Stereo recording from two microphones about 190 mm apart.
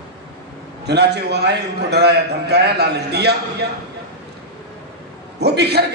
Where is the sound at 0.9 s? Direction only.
60° right (ahead or behind).